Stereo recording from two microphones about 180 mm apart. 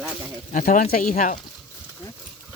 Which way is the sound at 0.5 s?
50° left (ahead or behind).